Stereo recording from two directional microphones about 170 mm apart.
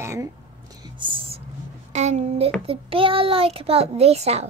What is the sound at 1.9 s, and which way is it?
Speech, 40° right (ahead or behind).